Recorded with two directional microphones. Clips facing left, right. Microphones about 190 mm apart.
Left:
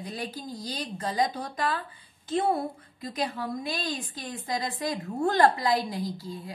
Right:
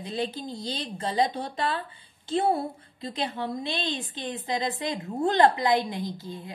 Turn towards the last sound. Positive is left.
turn(degrees=-20)  # may be behind; listen again after turning